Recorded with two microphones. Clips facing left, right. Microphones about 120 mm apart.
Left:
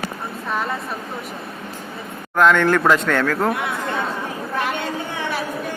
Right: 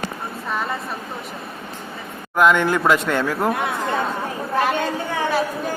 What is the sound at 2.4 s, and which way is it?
A man's voice, 10° right (ahead or behind).